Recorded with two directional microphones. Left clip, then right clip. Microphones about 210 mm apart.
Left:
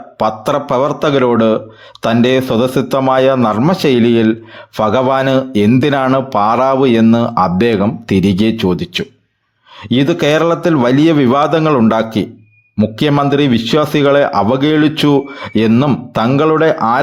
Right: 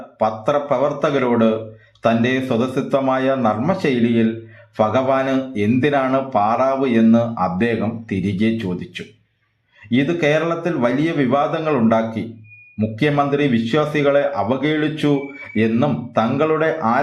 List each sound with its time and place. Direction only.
0.2 s a man's voice: 45° left (ahead or behind)